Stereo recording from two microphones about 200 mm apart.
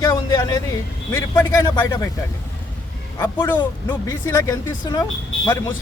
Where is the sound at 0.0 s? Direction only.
20° left (ahead or behind).